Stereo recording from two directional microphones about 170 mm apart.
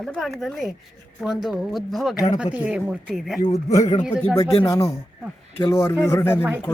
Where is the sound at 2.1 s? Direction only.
20° left (ahead or behind).